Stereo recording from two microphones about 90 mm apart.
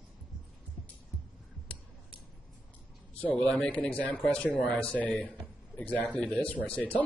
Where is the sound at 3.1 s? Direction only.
15° left (ahead or behind).